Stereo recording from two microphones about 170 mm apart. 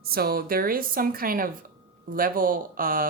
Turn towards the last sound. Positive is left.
turn(degrees=-55)  # may be behind; listen again after turning